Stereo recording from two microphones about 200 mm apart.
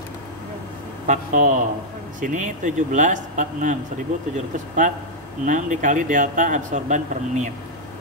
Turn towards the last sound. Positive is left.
turn(degrees=-35)  # may be behind; listen again after turning